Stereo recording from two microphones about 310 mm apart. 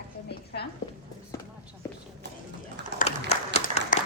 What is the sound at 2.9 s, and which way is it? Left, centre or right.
Applause, right.